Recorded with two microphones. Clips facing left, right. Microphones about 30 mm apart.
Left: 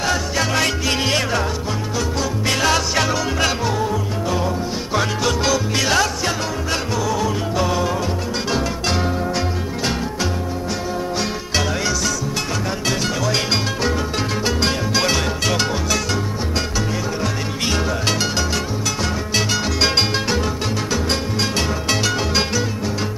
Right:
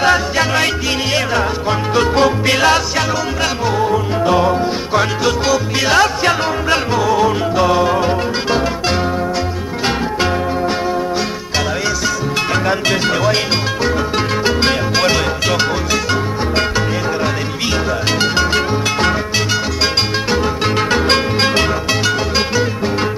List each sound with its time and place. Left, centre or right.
0.0 s music: right
2.0 s music: right
2.5 s music: right
4.3 s music: right
4.9 s music: centre
6.2 s music: right
14.4 s music: right
15.0 s music: centre
20.9 s music: right